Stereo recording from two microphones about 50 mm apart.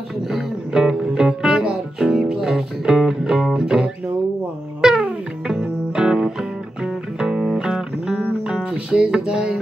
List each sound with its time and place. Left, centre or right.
0.3 s music: centre
4.8 s music: centre